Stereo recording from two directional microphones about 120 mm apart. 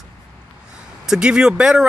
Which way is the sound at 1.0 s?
5° right (ahead or behind).